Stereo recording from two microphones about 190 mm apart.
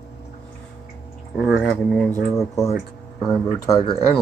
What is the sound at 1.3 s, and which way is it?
Speech, centre (ahead or behind).